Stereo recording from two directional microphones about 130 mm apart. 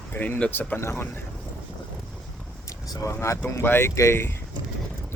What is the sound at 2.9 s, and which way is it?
A man's voice, 25° left (ahead or behind).